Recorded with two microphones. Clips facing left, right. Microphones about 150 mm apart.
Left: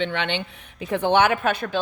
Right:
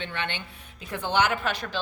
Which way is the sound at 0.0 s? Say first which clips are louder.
Left 8 dB; 85° left.